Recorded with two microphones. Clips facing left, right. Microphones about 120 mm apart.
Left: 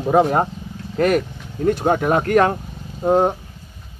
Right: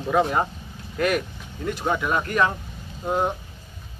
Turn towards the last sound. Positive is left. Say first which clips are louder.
# left 8 dB
turn(degrees=45)  # may be behind; listen again after turning